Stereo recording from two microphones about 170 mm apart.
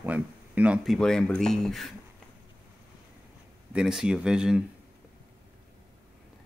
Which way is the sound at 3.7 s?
5° right (ahead or behind).